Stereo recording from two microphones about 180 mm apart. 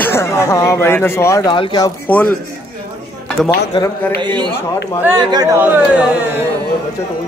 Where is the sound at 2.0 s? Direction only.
10° left (ahead or behind).